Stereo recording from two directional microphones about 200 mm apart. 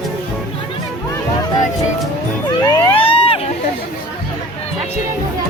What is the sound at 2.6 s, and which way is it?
Vehicle, 25° left (ahead or behind).